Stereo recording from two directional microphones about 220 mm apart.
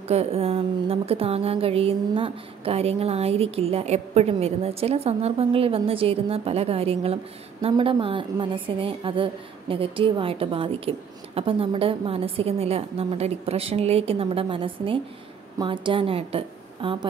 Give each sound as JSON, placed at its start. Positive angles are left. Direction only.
{"t": 0.1, "sound": "a woman's voice", "side_deg": -30}